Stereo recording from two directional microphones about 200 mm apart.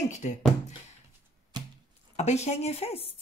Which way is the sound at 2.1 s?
35° left (ahead or behind).